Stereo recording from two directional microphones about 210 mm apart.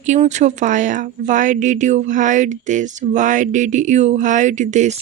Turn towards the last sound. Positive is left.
turn(degrees=-35)  # may be behind; listen again after turning